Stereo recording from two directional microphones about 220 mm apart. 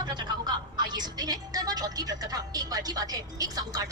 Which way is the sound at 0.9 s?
20° right (ahead or behind).